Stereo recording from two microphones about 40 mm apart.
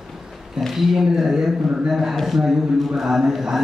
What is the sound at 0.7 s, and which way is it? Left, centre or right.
A man's voice, centre.